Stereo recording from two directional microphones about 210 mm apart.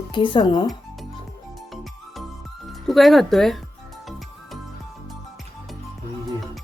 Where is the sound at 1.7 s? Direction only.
Centre (ahead or behind).